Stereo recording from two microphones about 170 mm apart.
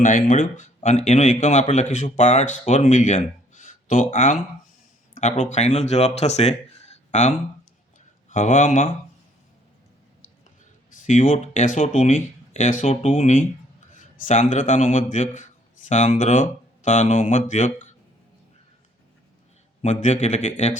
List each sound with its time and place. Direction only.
0.0 s speech: 45° left (ahead or behind)
3.5 s a sound: 45° left (ahead or behind)
5.4 s speech: 40° left (ahead or behind)
11.0 s speech: 45° left (ahead or behind)
19.8 s speech: 40° left (ahead or behind)